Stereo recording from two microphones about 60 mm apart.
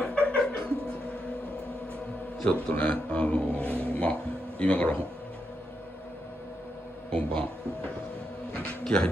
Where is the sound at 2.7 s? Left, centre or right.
Left.